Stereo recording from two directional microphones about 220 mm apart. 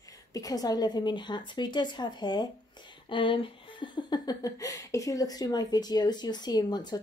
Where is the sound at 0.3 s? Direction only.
15° left (ahead or behind).